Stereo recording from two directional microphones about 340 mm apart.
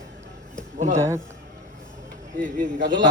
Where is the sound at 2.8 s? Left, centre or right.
Right.